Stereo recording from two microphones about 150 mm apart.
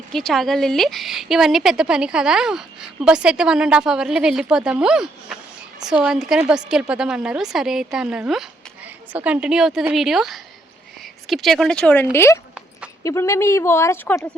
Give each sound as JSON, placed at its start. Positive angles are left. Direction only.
{"t": 0.1, "sound": "a woman's voice", "side_deg": 0}